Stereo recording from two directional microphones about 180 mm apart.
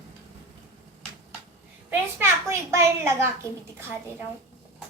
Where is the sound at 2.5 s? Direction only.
15° right (ahead or behind).